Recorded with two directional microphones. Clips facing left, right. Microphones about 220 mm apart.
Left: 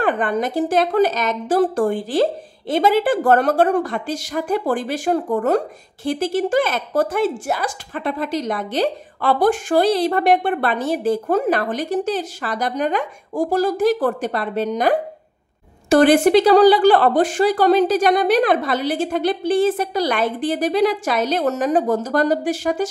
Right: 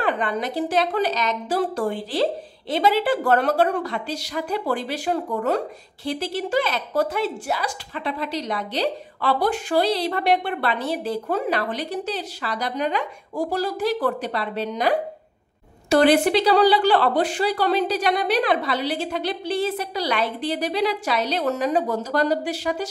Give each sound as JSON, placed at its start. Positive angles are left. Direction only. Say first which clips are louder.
{"t": 0.0, "sound": "speech", "louder": "left 4 dB", "side_deg": 50}